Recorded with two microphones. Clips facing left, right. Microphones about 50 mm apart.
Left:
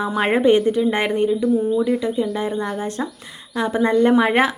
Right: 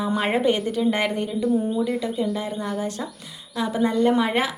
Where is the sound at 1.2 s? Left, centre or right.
Centre.